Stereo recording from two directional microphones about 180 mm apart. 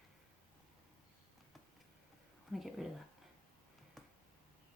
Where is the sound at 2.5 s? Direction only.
Centre (ahead or behind).